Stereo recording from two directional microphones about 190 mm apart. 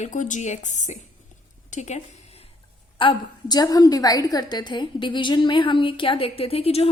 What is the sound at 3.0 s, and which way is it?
A woman's voice, 25° left (ahead or behind).